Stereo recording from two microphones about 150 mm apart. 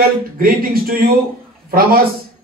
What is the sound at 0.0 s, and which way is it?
A man's voice, 75° right (ahead or behind).